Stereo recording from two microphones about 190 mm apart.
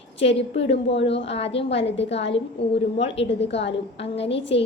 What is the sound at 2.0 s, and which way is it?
Speech, 70° left (ahead or behind).